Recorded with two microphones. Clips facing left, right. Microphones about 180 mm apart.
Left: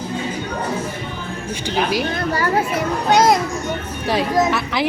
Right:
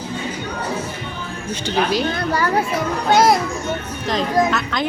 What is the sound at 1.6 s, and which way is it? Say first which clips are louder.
Speech: right 1 dB; 10° left (ahead or behind).